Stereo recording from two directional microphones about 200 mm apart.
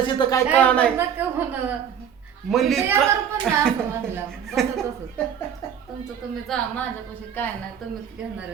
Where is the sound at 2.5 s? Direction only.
Centre (ahead or behind).